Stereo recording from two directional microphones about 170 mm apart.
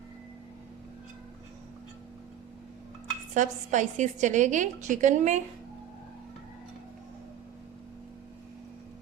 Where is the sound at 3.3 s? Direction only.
45° right (ahead or behind).